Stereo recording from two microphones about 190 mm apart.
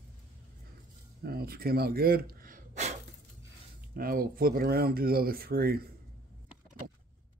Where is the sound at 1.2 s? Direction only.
55° right (ahead or behind).